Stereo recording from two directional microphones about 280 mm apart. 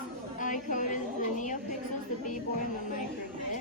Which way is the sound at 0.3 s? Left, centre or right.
Left.